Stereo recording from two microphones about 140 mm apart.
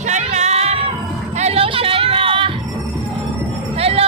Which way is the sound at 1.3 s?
50° right (ahead or behind).